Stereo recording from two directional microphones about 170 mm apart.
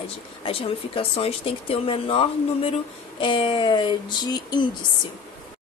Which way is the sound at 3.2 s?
30° left (ahead or behind).